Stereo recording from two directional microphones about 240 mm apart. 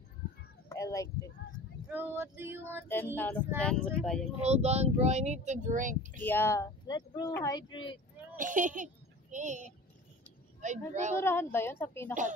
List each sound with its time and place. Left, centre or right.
0.7 s a sound: centre
1.9 s female singing: centre
3.2 s speech: centre
4.4 s speech: right
6.2 s speech: centre
8.4 s speech: right
11.1 s speech: centre